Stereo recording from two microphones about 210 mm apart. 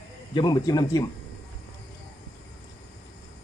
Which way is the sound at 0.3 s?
20° left (ahead or behind).